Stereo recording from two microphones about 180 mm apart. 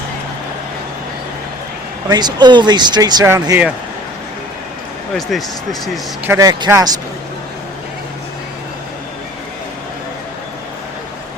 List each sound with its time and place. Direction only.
2.0 s speech: 25° right (ahead or behind)
5.3 s speech: centre (ahead or behind)
6.2 s speech: 20° right (ahead or behind)